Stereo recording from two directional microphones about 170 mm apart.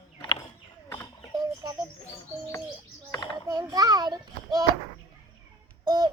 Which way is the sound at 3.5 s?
20° right (ahead or behind).